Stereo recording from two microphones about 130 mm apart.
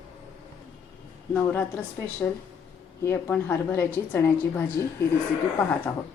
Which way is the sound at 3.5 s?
20° left (ahead or behind).